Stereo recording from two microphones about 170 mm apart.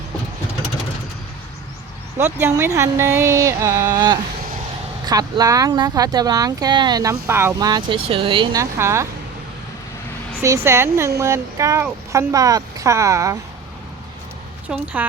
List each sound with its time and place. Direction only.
2.1 s speech: 15° right (ahead or behind); by 8.6 s 30° right (ahead or behind)
8.8 s speech: 15° right (ahead or behind)
10.4 s speech: 20° right (ahead or behind)
14.7 s speech: 5° right (ahead or behind)